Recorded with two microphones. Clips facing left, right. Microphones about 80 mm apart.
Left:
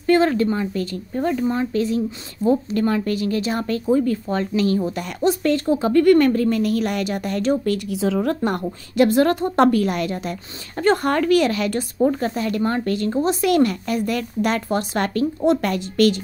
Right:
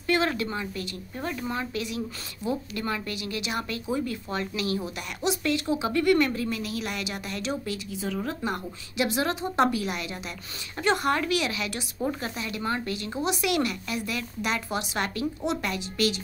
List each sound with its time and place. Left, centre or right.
0.0 s a woman's voice: left
7.9 s speech: left
8.5 s speech: left